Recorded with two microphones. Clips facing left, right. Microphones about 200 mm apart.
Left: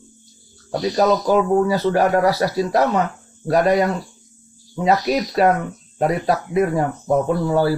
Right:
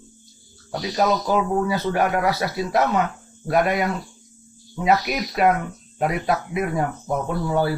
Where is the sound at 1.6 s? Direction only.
35° left (ahead or behind).